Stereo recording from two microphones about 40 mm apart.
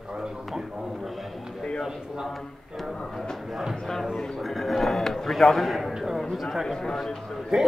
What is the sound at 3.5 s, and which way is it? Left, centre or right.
A man's voice, centre.